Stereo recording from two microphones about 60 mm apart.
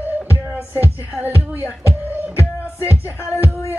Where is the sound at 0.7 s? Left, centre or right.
Right.